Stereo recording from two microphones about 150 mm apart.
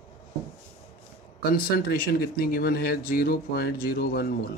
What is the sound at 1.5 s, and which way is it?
Speech, 90° left.